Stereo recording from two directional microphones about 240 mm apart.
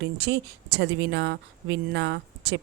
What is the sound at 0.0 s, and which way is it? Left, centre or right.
Speech, right.